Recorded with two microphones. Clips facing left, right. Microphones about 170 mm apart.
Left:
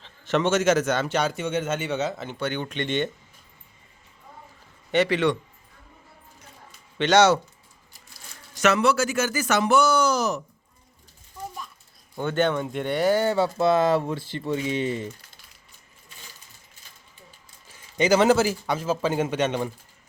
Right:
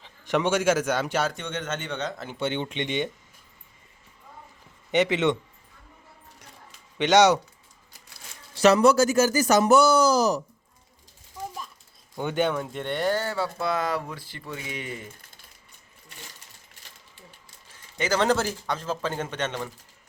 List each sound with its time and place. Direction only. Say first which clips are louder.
0.0 s a man's voice: left 1 dB; 15° right (ahead or behind)
1.3 s a man's voice: left 6 dB; 5° left (ahead or behind)
2.4 s speech: right 1 dB; 25° right (ahead or behind)
4.9 s speech: left 1 dB; 20° right (ahead or behind)
7.0 s speech: even; 15° right (ahead or behind)
8.5 s speech: right 3 dB; 35° right (ahead or behind)
12.1 s speech: left 2 dB; 10° right (ahead or behind); by 13.1 s 5° left (ahead or behind)
13.1 s speech: left 6 dB; 20° left (ahead or behind)
17.7 s a man's voice: left 6 dB; 15° left (ahead or behind)